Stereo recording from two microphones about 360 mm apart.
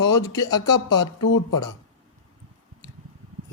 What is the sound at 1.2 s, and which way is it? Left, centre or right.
Speech, left.